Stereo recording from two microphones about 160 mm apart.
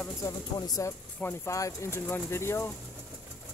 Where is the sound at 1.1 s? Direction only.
15° left (ahead or behind).